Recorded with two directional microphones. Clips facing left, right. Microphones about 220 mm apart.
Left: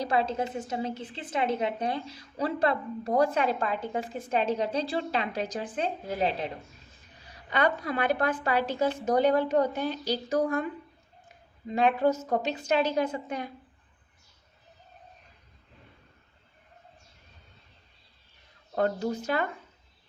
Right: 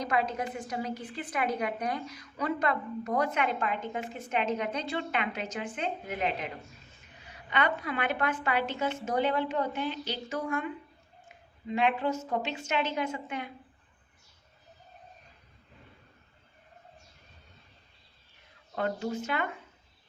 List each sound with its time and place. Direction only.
0.0 s a woman's voice: 30° left (ahead or behind)
11.7 s a woman's voice: 40° left (ahead or behind)
18.7 s a woman's voice: 35° left (ahead or behind)